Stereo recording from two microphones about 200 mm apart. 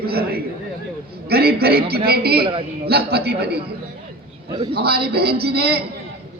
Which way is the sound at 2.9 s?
50° right (ahead or behind).